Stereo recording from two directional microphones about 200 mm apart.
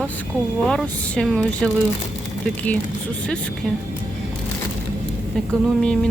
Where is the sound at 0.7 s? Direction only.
5° left (ahead or behind).